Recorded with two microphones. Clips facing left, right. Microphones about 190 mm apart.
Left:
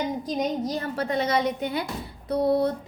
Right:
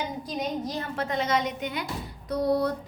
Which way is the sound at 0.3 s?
35° left (ahead or behind).